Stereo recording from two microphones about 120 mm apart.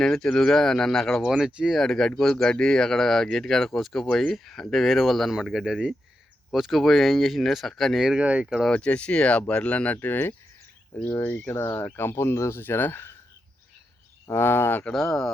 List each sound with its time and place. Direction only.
0.0 s speech: 5° left (ahead or behind)
8.7 s speech: 10° left (ahead or behind)
14.3 s speech: 20° left (ahead or behind)
14.9 s speech: 5° left (ahead or behind)